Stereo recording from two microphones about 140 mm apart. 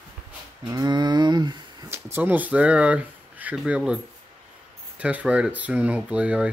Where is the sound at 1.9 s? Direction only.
15° right (ahead or behind).